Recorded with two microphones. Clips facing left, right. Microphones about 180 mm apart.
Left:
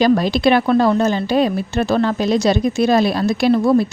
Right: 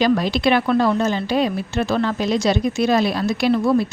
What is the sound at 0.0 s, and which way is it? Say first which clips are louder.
Speech: left 3 dB; 40° left (ahead or behind).